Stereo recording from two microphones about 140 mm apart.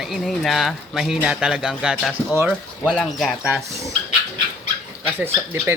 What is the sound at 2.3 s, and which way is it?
Speech, 15° right (ahead or behind).